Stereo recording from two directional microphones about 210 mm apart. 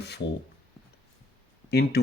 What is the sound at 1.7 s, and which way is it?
Speech, 50° left (ahead or behind).